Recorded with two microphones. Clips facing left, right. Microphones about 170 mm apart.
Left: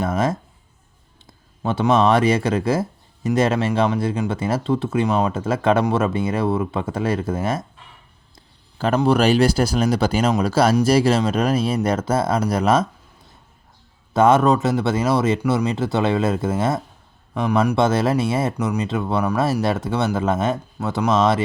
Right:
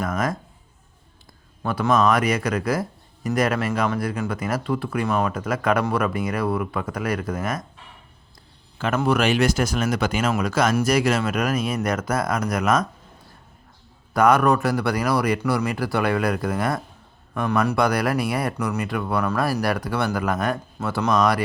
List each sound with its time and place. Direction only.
0.0 s speech: 25° left (ahead or behind)
1.6 s speech: 25° left (ahead or behind)
9.0 s speech: 35° left (ahead or behind)
14.1 s a man's voice: 25° left (ahead or behind)